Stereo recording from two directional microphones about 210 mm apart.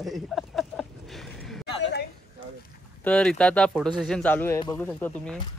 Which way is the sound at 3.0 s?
5° left (ahead or behind).